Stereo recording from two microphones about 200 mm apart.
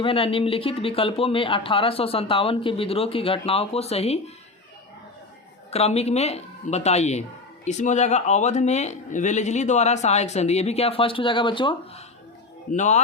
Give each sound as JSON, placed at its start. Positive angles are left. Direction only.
{"t": 0.0, "sound": "speech", "side_deg": 25}
{"t": 5.7, "sound": "speech", "side_deg": 30}
{"t": 12.7, "sound": "speech", "side_deg": 35}